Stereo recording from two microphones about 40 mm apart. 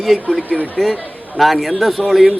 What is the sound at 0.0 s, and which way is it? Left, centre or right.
A man's voice, centre.